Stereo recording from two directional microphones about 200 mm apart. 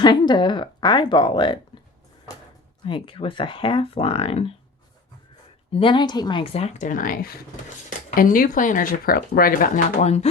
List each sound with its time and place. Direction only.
0.0 s speech: 20° left (ahead or behind)
2.8 s speech: 25° left (ahead or behind)
5.7 s speech: 25° left (ahead or behind)